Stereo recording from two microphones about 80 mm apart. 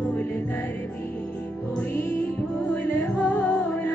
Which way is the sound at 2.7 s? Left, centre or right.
Left.